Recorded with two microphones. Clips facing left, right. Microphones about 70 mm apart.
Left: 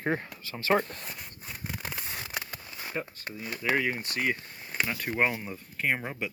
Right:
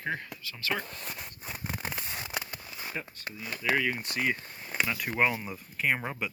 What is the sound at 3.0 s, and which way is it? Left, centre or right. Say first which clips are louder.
Speech: left 6 dB; left.